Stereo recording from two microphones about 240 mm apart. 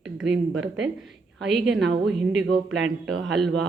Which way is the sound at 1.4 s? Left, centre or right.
Right.